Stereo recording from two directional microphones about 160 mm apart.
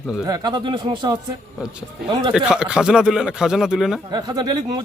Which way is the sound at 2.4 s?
5° right (ahead or behind).